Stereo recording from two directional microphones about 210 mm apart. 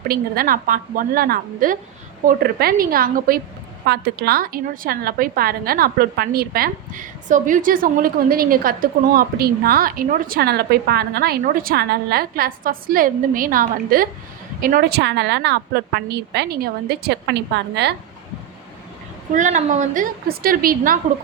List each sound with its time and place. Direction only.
0.1 s a woman's voice: 45° right (ahead or behind)
19.3 s a woman's voice: 35° right (ahead or behind)